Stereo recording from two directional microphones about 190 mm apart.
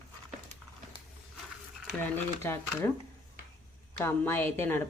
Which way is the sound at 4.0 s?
10° left (ahead or behind).